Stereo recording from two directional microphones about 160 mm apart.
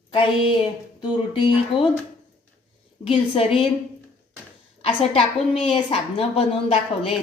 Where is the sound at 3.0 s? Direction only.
35° left (ahead or behind).